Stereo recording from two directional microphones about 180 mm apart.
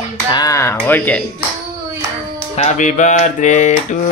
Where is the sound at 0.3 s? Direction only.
20° left (ahead or behind).